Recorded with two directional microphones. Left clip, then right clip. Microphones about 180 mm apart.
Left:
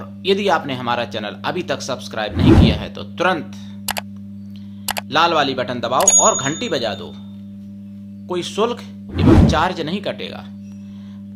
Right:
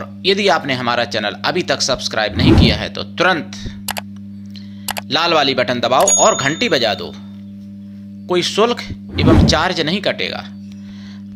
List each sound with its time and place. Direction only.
0.3 s speech: 10° right (ahead or behind)
5.1 s speech: 15° right (ahead or behind)
8.3 s speech: 15° right (ahead or behind)
9.2 s speech: centre (ahead or behind)
9.5 s speech: 15° right (ahead or behind)